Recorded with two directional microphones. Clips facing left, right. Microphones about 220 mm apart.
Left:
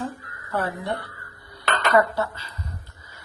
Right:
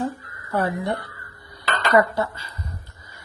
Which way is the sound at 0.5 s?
15° right (ahead or behind).